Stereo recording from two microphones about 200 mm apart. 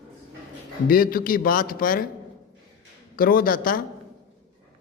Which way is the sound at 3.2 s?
45° left (ahead or behind).